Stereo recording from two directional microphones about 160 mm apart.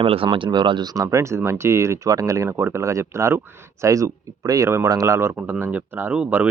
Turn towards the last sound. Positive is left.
turn(degrees=-10)  # may be behind; listen again after turning